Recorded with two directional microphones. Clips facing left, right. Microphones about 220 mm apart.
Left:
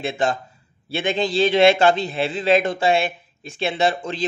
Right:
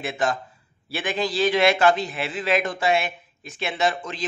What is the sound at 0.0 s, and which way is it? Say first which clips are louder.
A man's voice: left 3 dB; 25° left (ahead or behind).